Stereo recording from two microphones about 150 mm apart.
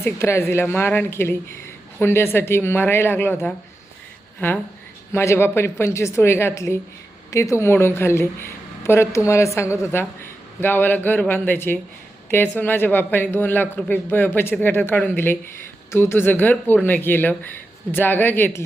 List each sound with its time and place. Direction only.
0.0 s a woman's voice: 15° left (ahead or behind)